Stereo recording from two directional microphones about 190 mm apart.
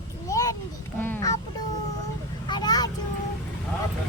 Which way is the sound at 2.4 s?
20° left (ahead or behind).